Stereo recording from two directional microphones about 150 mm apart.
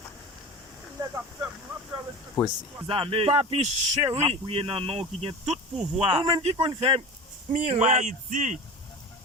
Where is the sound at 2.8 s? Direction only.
35° right (ahead or behind).